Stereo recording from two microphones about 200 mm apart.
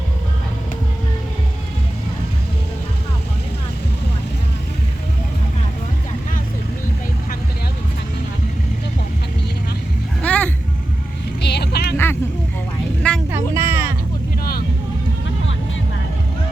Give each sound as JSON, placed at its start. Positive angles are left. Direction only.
{"t": 10.2, "sound": "vehicle", "side_deg": 5}
{"t": 11.4, "sound": "a sound", "side_deg": 55}
{"t": 13.0, "sound": "vehicle", "side_deg": 5}
{"t": 13.3, "sound": "music", "side_deg": -15}